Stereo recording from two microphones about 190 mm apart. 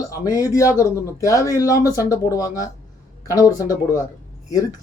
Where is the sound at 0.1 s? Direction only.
15° left (ahead or behind).